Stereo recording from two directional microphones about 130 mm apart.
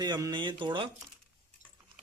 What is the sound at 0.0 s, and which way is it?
Speech, 30° right (ahead or behind).